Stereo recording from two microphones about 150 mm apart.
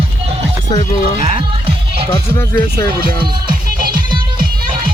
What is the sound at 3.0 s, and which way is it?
Music, 75° right (ahead or behind).